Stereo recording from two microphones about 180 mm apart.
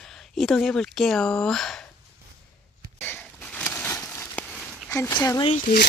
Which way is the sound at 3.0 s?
10° left (ahead or behind).